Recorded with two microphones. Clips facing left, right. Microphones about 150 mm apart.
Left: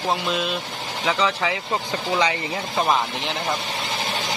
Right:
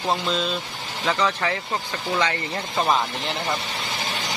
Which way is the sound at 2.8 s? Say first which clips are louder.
Even; centre (ahead or behind).